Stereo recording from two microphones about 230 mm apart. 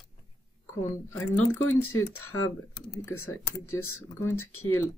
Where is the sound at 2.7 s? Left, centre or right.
Centre.